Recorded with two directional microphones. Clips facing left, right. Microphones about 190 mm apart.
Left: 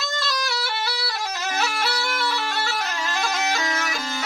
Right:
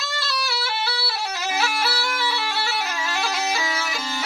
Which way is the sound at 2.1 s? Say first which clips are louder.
Even; centre (ahead or behind).